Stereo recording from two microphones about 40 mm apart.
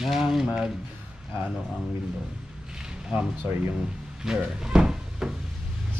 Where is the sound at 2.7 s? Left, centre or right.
Centre.